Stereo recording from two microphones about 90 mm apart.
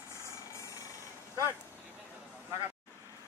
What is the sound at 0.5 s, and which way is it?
Vehicle, 35° left (ahead or behind).